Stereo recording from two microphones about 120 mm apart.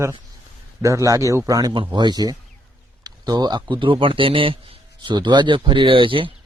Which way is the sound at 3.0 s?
35° right (ahead or behind).